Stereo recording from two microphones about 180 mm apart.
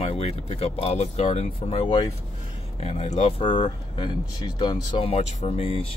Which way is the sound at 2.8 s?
35° left (ahead or behind).